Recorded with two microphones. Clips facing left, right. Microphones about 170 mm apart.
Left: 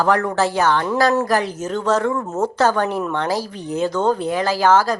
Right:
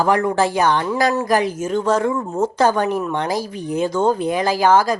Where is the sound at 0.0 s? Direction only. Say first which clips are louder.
Right 1 dB; 15° right (ahead or behind).